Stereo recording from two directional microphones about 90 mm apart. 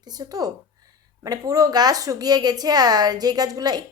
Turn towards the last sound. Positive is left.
turn(degrees=-45)  # may be behind; listen again after turning